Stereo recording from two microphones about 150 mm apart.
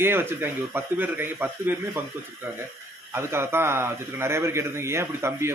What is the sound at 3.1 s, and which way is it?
A man's voice, 15° right (ahead or behind).